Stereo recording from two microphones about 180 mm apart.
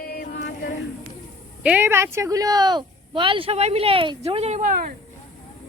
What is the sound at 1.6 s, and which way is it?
Speech, 10° right (ahead or behind).